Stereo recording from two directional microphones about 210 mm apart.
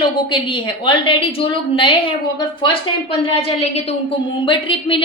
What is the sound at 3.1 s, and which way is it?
A woman's voice, 25° left (ahead or behind).